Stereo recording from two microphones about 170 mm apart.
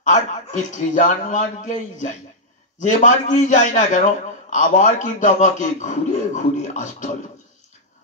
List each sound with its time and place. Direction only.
0.0 s a man's voice: 45° left (ahead or behind)